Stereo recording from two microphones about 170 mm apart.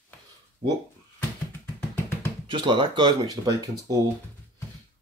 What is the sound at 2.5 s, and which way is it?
Speech, 30° right (ahead or behind).